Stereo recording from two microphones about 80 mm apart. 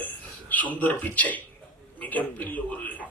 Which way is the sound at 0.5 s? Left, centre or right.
Left.